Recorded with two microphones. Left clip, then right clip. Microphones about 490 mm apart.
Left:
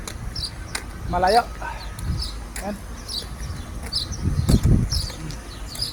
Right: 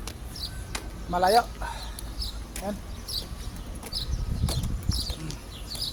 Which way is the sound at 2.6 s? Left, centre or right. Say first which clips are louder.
Left 2 dB; right.